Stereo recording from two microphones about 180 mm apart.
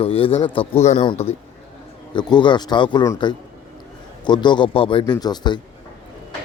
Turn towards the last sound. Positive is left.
turn(degrees=25)  # may be behind; listen again after turning